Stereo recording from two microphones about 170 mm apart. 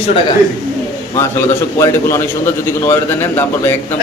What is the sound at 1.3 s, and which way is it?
Speech, 15° left (ahead or behind).